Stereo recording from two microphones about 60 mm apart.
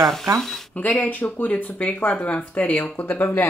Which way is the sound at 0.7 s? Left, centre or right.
Left.